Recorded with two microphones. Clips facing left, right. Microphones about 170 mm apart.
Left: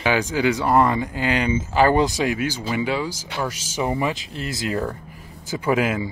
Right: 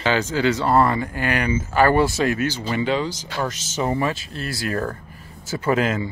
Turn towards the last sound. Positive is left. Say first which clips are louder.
# even
turn(degrees=10)  # may be behind; listen again after turning